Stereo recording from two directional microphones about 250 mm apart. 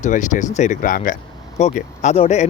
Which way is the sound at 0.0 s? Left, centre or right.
Left.